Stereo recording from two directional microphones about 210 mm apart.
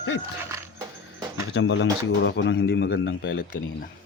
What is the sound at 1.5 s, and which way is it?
Speech, 60° left (ahead or behind).